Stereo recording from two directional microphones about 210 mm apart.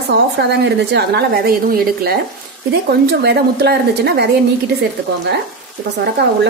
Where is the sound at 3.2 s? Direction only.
55° right (ahead or behind).